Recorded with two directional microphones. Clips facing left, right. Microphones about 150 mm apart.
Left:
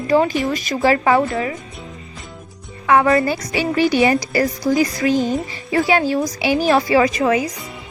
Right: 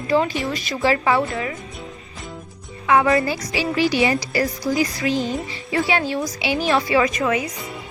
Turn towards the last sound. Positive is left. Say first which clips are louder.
# left 4 dB
turn(degrees=30)  # may be behind; listen again after turning